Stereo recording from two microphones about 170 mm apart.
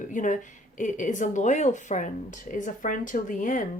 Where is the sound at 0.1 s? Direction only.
50° left (ahead or behind).